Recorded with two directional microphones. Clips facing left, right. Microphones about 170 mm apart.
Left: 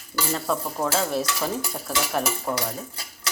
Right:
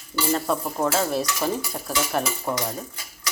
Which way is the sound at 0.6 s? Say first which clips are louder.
Right 2 dB; 5° right (ahead or behind).